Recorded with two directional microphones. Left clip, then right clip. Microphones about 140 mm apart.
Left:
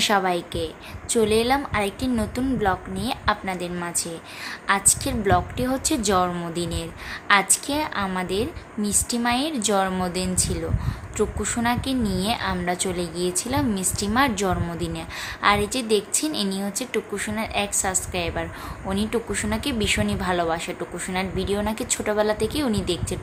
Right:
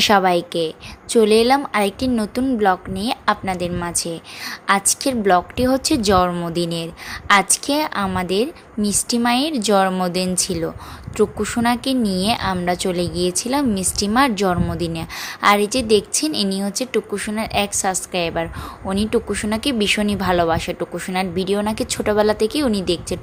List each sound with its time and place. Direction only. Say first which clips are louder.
0.0 s a woman's voice: right 6 dB; 40° right (ahead or behind)